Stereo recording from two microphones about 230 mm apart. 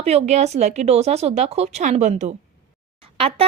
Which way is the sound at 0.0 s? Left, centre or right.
Right.